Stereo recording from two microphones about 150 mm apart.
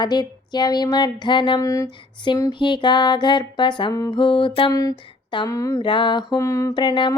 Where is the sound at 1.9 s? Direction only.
30° left (ahead or behind).